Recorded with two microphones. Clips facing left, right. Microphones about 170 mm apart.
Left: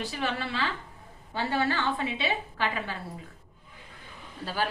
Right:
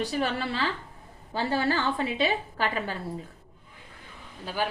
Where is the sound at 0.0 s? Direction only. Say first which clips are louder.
Right 4 dB; 40° right (ahead or behind).